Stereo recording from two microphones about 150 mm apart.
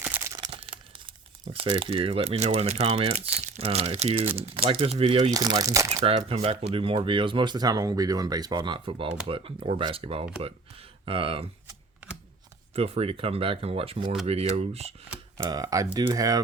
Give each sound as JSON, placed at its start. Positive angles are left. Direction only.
{"t": 0.0, "sound": "crumpling", "side_deg": -15}
{"t": 0.3, "sound": "crumpling", "side_deg": -30}
{"t": 1.5, "sound": "speech", "side_deg": -35}
{"t": 5.3, "sound": "speech", "side_deg": -25}
{"t": 6.1, "sound": "speech", "side_deg": -40}
{"t": 12.7, "sound": "speech", "side_deg": -40}
{"t": 15.4, "sound": "speech", "side_deg": -25}